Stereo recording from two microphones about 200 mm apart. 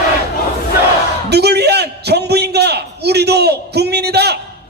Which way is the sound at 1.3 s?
55° right (ahead or behind).